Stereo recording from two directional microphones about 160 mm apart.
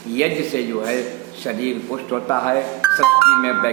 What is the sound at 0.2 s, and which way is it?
Speech, 15° left (ahead or behind).